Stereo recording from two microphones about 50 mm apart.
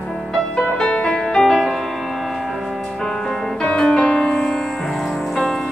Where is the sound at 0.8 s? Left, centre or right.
Centre.